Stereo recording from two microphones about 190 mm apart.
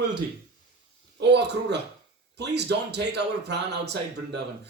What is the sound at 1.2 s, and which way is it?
Speech, 65° right (ahead or behind).